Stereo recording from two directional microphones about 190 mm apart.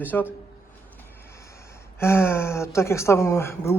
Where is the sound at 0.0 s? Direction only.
10° left (ahead or behind).